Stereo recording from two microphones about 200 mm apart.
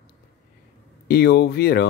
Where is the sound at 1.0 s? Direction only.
55° left (ahead or behind).